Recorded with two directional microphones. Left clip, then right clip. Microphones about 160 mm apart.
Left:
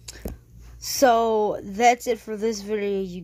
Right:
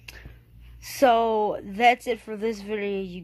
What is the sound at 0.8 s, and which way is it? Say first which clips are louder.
Speech: left 1 dB; 15° left (ahead or behind).